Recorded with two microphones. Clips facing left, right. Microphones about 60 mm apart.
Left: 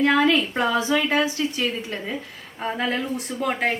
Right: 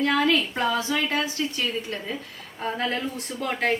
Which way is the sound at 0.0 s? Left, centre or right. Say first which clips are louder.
Left 3 dB; left.